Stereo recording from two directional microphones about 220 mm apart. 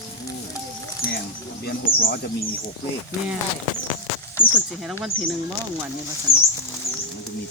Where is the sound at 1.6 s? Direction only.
45° left (ahead or behind).